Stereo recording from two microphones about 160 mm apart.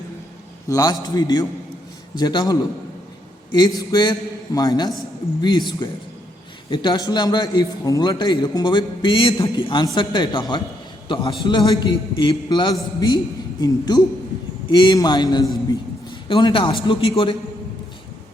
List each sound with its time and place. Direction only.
0.7 s a man's voice: 20° left (ahead or behind)